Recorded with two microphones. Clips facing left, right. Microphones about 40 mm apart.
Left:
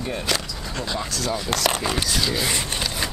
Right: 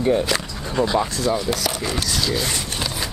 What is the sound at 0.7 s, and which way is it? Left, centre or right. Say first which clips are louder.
Speech: right 9 dB; centre.